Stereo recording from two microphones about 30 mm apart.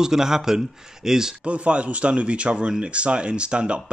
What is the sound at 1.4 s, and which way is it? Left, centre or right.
Speech, right.